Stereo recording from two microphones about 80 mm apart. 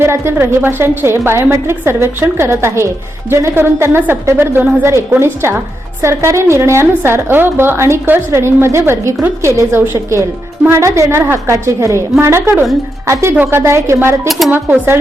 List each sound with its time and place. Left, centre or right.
0.3 s a woman's voice: right
14.3 s speech: centre
14.5 s a woman's voice: right